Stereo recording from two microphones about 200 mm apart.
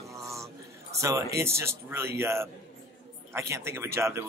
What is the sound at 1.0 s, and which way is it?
Speech, 15° right (ahead or behind).